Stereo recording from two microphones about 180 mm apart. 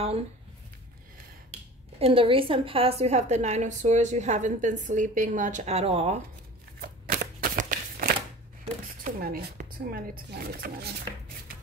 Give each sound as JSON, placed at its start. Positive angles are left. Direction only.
{"t": 2.0, "sound": "a woman's voice", "side_deg": -30}
{"t": 6.8, "sound": "a sound", "side_deg": -50}
{"t": 9.0, "sound": "speech", "side_deg": -50}